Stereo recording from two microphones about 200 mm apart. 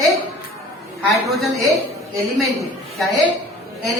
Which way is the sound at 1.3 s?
Centre (ahead or behind).